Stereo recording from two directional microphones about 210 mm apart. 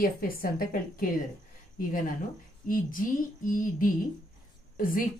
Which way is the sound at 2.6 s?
40° left (ahead or behind).